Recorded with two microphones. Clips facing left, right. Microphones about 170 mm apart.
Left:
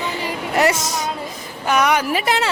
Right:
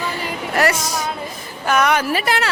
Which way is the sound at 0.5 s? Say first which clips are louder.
Left 1 dB; 20° left (ahead or behind).